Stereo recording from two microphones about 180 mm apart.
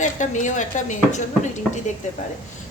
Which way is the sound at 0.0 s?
45° left (ahead or behind).